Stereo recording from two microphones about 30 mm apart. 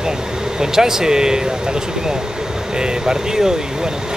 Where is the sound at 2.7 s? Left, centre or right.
Right.